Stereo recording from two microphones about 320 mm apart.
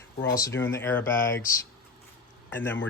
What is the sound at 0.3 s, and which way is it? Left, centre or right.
Speech, centre.